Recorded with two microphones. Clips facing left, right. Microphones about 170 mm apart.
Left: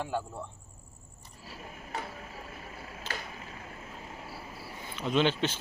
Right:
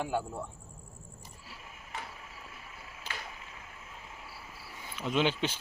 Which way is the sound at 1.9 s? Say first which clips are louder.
Left 5 dB; 40° left (ahead or behind).